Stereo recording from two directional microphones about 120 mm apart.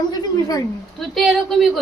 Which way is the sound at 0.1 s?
30° left (ahead or behind).